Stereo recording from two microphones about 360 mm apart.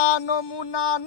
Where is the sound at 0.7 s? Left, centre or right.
Left.